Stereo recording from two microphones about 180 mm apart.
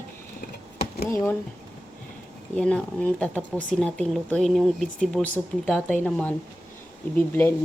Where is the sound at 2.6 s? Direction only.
5° left (ahead or behind).